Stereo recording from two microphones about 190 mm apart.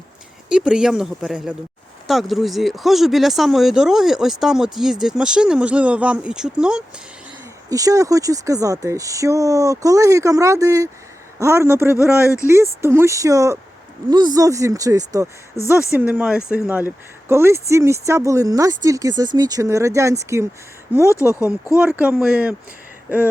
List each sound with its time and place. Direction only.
0.4 s speech: 5° right (ahead or behind)
7.7 s speech: 20° right (ahead or behind)